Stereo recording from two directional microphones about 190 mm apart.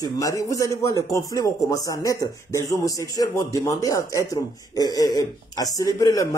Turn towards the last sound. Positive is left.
turn(degrees=15)  # may be behind; listen again after turning